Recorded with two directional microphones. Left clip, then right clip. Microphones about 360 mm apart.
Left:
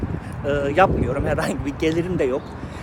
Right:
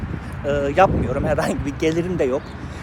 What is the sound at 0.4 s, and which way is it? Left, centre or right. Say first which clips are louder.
Speech: right 1 dB; centre.